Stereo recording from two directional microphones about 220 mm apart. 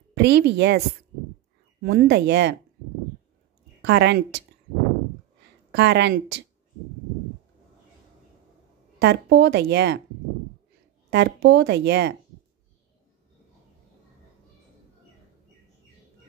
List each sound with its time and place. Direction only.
0.1 s a woman's voice: 50° right (ahead or behind)
3.8 s speech: 50° right (ahead or behind)
5.7 s speech: 50° right (ahead or behind)
9.0 s speech: 50° right (ahead or behind)
11.1 s speech: 50° right (ahead or behind)